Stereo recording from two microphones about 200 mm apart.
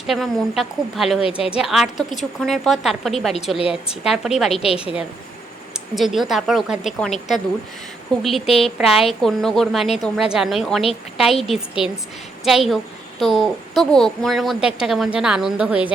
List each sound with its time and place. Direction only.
0.1 s a child's voice: centre (ahead or behind)
1.2 s a woman's voice: 30° left (ahead or behind)
1.5 s a child's voice: 5° right (ahead or behind)
4.6 s a woman's voice: 30° left (ahead or behind)
5.7 s a child's voice: centre (ahead or behind)